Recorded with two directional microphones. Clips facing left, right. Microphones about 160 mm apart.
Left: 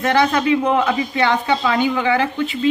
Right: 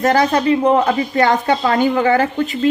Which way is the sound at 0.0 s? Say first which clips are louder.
Right 2 dB; 40° right (ahead or behind).